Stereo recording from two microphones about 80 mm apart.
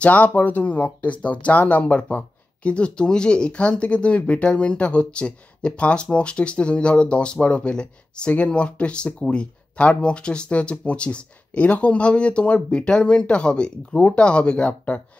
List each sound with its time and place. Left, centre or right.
0.0 s speech: centre